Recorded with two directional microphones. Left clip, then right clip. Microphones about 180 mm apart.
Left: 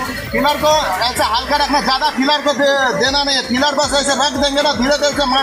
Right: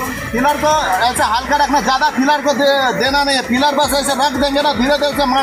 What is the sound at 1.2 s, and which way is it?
Speech, 25° right (ahead or behind).